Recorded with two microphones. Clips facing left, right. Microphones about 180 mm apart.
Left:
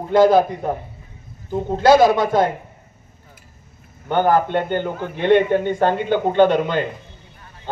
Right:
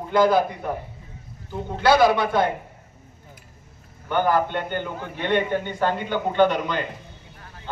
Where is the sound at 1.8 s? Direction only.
45° left (ahead or behind).